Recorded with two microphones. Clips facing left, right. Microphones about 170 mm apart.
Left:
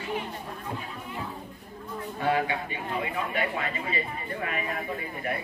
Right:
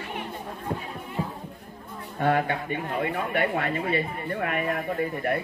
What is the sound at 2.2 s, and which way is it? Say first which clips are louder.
Speech: right 3 dB; 55° right (ahead or behind).